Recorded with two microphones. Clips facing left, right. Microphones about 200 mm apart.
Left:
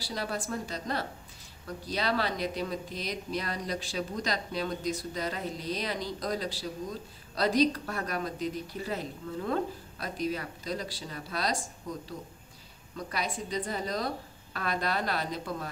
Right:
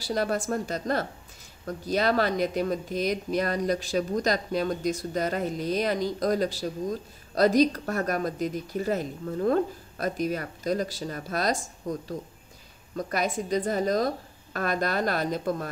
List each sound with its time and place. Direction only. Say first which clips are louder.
0.0 s speech: right 8 dB; 50° right (ahead or behind)
12.9 s speech: right 7 dB; 45° right (ahead or behind)